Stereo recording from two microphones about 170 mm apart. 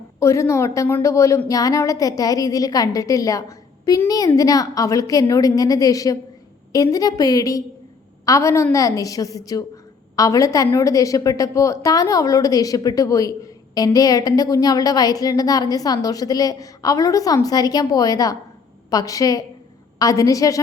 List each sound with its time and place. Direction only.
0.2 s a woman's voice: 15° left (ahead or behind)